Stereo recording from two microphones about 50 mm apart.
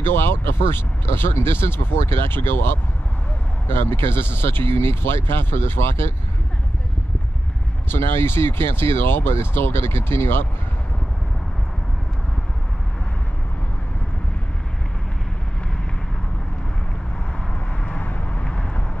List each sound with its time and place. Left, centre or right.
0.0 s speech: left
7.9 s speech: left
17.8 s vehicle: left